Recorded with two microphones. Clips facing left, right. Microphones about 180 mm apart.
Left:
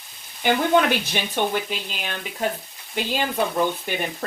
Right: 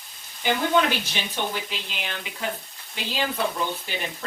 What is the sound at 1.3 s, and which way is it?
Speech, 50° left (ahead or behind).